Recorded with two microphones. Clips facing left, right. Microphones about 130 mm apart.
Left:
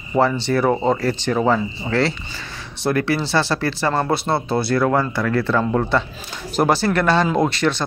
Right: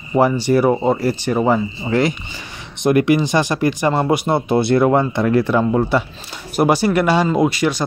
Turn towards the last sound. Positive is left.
turn(degrees=-10)  # may be behind; listen again after turning